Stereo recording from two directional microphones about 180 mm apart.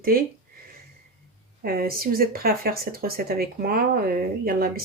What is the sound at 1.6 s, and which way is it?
Speech, 55° right (ahead or behind).